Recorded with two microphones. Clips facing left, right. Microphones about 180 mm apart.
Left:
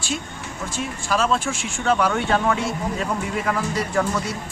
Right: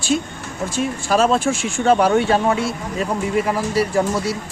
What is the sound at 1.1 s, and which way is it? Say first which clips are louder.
Speech: right 5 dB; 35° right (ahead or behind).